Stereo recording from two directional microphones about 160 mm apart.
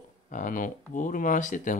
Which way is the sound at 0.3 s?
55° left (ahead or behind).